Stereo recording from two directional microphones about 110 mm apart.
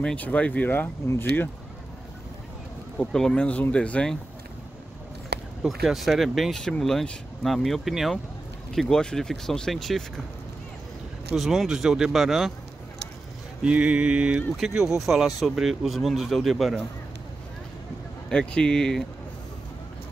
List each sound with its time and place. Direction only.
0.0 s speech: 10° left (ahead or behind)
3.0 s speech: 5° left (ahead or behind)
5.6 s speech: centre (ahead or behind)
11.3 s speech: centre (ahead or behind)
13.6 s a sound: 10° right (ahead or behind)
14.8 s speech: centre (ahead or behind)
18.3 s speech: 10° left (ahead or behind)